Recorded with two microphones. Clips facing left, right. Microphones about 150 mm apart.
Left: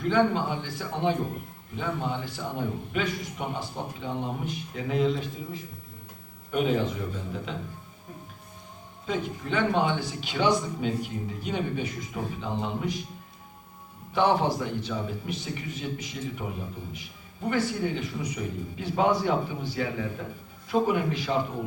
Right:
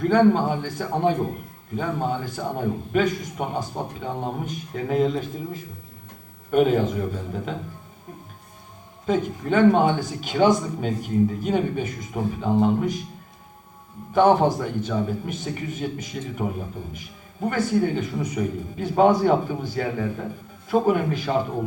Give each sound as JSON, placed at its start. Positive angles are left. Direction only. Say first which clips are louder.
{"t": 0.0, "sound": "a man's voice", "louder": "right 6 dB", "side_deg": -45}
{"t": 9.0, "sound": "a man's voice", "louder": "right 7 dB", "side_deg": -45}
{"t": 14.1, "sound": "a man's voice", "louder": "right 6 dB", "side_deg": -45}